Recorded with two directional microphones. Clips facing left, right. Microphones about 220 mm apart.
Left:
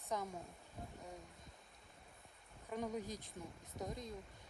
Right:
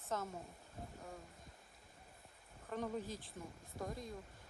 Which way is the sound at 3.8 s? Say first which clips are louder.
Even; 20° left (ahead or behind).